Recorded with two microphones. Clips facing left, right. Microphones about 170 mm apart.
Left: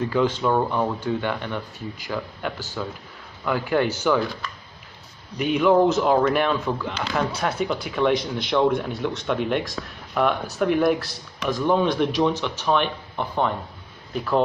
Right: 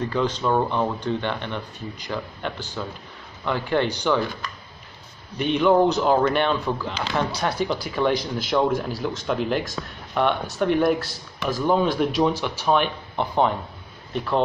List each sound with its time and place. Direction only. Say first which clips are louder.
0.1 s speech: left 1 dB; 10° left (ahead or behind)
5.4 s speech: even; 5° left (ahead or behind); by 13.6 s 15° right (ahead or behind)
14.1 s speech: left 1 dB; 5° left (ahead or behind)